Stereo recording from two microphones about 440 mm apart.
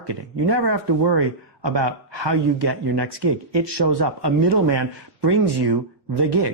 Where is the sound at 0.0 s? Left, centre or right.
Right.